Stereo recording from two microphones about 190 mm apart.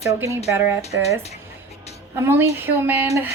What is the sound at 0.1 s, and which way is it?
Speech, 15° right (ahead or behind).